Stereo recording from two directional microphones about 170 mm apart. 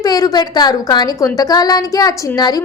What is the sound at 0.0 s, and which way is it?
A woman's voice, 20° left (ahead or behind).